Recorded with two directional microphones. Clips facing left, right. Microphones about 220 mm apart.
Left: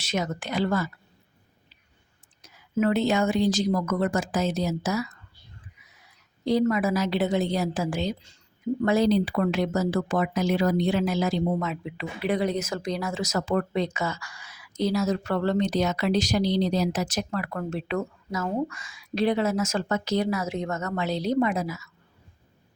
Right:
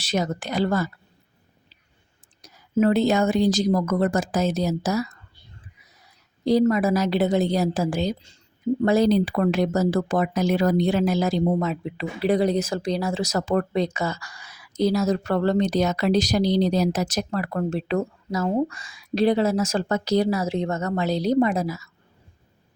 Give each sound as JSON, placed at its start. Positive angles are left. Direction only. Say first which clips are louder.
{"t": 0.0, "sound": "speech", "louder": "right 4 dB", "side_deg": -35}
{"t": 2.4, "sound": "speech", "louder": "right 4 dB", "side_deg": -40}
{"t": 6.4, "sound": "speech", "louder": "right 4 dB", "side_deg": -35}